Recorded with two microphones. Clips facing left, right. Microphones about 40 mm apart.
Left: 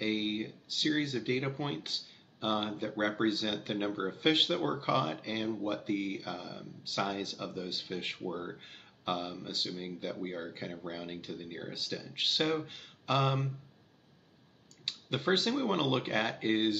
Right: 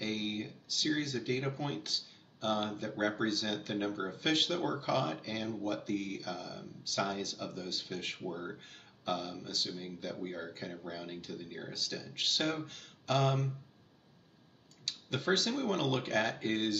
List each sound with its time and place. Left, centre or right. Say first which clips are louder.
0.0 s speech: left 4 dB; left
14.9 s speech: left 2 dB; left